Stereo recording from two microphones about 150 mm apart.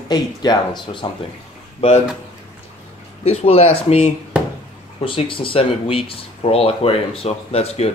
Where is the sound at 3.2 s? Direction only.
45° left (ahead or behind).